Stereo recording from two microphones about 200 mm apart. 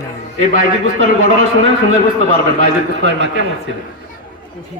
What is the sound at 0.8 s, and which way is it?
Speech, 80° right.